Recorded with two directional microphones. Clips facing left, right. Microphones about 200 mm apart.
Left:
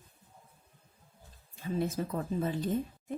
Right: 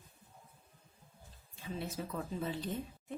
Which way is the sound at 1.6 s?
45° left (ahead or behind).